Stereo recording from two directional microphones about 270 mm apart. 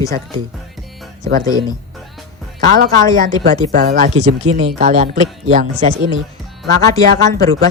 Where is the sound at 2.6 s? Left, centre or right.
Right.